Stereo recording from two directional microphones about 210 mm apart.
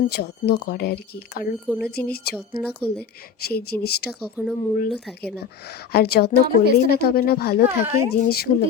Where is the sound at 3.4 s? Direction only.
50° left (ahead or behind).